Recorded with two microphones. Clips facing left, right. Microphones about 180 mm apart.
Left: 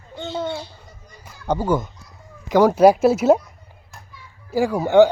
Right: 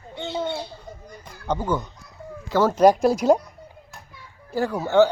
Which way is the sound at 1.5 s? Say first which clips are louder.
Left 4 dB; 10° left (ahead or behind).